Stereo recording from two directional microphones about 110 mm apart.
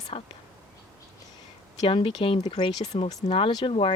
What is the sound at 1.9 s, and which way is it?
Speech, 50° left (ahead or behind).